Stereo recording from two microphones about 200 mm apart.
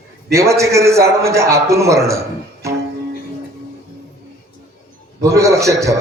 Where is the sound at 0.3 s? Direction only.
15° right (ahead or behind).